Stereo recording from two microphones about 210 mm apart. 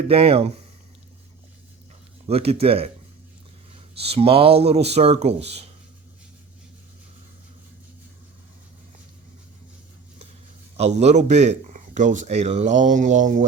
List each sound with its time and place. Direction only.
0.1 s speech: 25° right (ahead or behind)
2.2 s speech: 30° right (ahead or behind)
4.0 s speech: 30° right (ahead or behind)
10.8 s speech: 30° right (ahead or behind)